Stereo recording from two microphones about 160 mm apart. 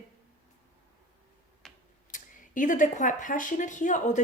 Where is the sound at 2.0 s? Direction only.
55° left (ahead or behind).